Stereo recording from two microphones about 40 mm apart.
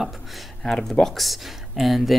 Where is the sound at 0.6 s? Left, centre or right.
Centre.